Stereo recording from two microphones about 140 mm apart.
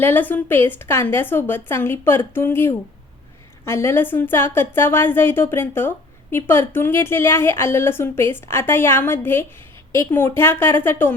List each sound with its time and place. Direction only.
0.0 s a woman's voice: 15° left (ahead or behind)